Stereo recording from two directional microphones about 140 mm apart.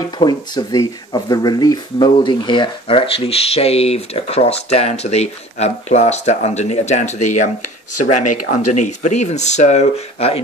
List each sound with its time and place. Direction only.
0.2 s speech: 30° left (ahead or behind); by 7.5 s 60° left (ahead or behind)
8.7 s speech: 60° left (ahead or behind)